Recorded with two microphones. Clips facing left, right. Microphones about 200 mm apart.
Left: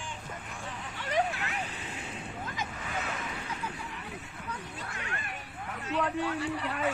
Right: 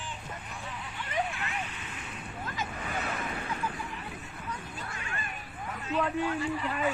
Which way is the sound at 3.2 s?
55° right (ahead or behind).